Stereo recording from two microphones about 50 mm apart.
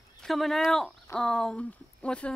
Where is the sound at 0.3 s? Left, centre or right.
Centre.